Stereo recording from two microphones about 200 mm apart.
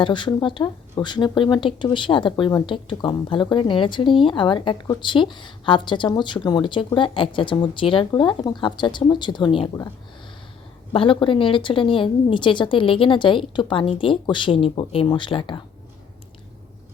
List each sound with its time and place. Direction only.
0.0 s speech: 25° left (ahead or behind)
10.9 s speech: 25° left (ahead or behind)